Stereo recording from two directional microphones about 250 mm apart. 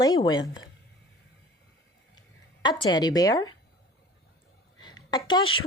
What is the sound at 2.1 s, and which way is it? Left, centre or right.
Speech, centre.